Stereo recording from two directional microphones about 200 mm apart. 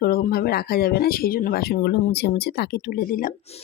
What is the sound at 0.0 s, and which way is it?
Speech, 50° left (ahead or behind).